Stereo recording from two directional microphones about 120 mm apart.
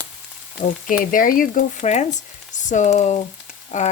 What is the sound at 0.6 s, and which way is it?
Speech, 90° left.